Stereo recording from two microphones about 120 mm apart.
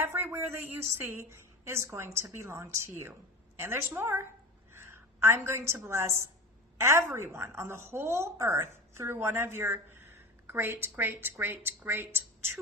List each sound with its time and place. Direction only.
0.0 s a woman's voice: 20° right (ahead or behind)